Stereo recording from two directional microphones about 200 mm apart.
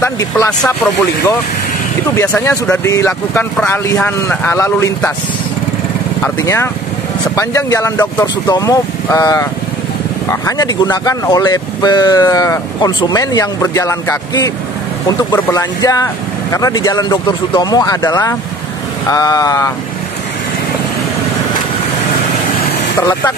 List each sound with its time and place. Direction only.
0.0 s speech: 15° left (ahead or behind)
2.1 s speech: 15° left (ahead or behind)
6.2 s speech: 15° left (ahead or behind)
22.9 s speech: 15° left (ahead or behind)